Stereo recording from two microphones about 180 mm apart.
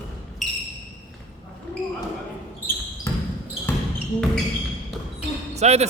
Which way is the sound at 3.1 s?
20° left (ahead or behind).